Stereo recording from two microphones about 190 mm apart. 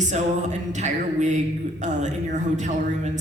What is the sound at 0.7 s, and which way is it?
Speech, 40° right (ahead or behind).